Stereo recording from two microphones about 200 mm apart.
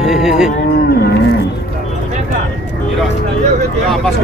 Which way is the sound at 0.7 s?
50° left (ahead or behind).